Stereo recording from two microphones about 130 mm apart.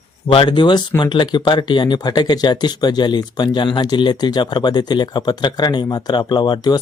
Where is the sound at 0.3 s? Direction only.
40° left (ahead or behind).